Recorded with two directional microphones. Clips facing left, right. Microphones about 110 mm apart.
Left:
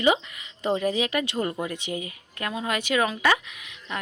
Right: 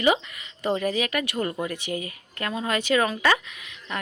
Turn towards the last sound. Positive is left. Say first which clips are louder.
# right 1 dB
turn(degrees=15)  # may be behind; listen again after turning